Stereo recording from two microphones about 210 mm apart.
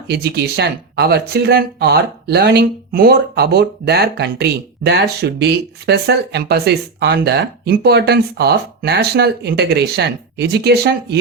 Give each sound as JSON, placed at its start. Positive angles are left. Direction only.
{"t": 0.1, "sound": "speech", "side_deg": -50}